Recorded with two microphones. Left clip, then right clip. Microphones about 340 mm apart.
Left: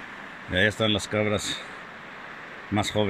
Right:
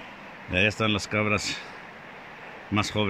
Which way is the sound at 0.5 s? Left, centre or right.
Centre.